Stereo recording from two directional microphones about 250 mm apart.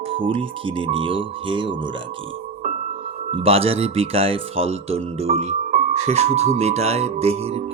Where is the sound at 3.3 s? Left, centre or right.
Right.